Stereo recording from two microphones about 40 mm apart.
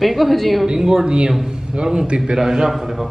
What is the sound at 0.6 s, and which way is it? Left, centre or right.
A man's voice, centre.